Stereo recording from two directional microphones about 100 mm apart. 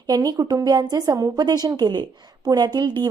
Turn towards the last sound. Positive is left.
turn(degrees=-45)  # may be behind; listen again after turning